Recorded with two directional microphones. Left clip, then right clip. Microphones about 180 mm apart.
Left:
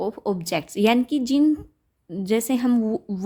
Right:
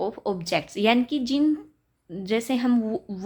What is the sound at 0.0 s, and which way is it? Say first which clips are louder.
A woman's voice: left 2 dB; 30° left (ahead or behind).